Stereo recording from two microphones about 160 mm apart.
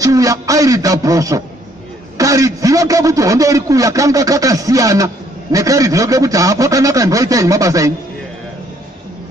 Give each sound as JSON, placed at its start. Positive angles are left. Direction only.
{"t": 0.0, "sound": "a man's voice", "side_deg": -20}